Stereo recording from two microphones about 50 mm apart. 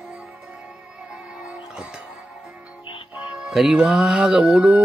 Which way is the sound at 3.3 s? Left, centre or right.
Centre.